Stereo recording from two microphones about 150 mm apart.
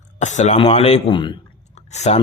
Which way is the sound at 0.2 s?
50° left (ahead or behind).